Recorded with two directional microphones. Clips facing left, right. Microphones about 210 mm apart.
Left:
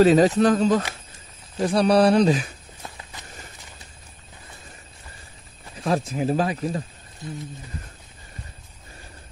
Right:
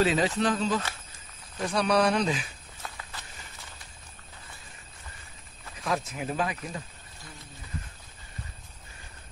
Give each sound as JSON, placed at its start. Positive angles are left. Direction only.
{"t": 0.0, "sound": "speech", "side_deg": 40}
{"t": 1.6, "sound": "speech", "side_deg": 35}
{"t": 2.8, "sound": "walk", "side_deg": 20}
{"t": 5.8, "sound": "speech", "side_deg": 30}